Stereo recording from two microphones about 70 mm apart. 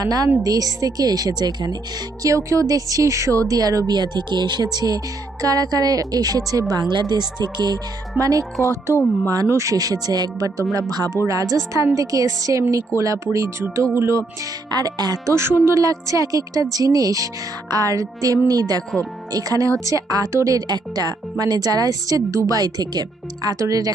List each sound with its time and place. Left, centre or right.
0.0 s a woman's voice: right
2.2 s a woman's voice: right
3.9 s a woman's voice: right
7.0 s speech: right
8.2 s a woman's voice: right
8.6 s speech: right
9.7 s a woman's voice: right
11.5 s speech: right
14.7 s speech: right
15.3 s speech: right
15.8 s a woman's voice: right
20.1 s a woman's voice: right
20.3 s speech: right
20.6 s a woman's voice: right